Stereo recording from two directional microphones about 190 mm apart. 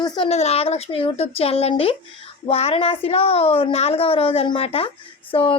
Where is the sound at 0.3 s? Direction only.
35° left (ahead or behind).